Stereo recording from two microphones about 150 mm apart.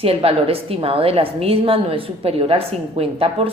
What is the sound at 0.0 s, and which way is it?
A woman's voice, 40° right (ahead or behind).